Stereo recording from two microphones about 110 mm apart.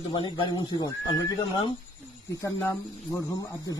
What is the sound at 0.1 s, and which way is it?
Speech, 45° left (ahead or behind).